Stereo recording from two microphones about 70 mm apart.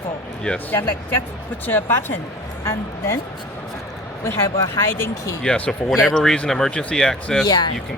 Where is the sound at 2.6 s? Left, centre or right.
Left.